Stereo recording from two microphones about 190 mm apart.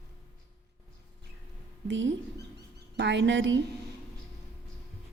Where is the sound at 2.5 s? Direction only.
65° right (ahead or behind).